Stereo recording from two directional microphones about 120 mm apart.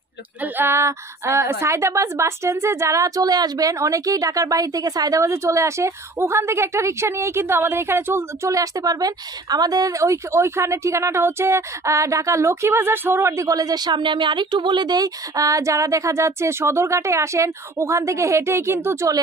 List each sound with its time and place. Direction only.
0.4 s a woman's voice: 20° right (ahead or behind)